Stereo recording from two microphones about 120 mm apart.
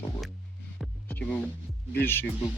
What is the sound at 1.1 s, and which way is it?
Speech, 15° left (ahead or behind).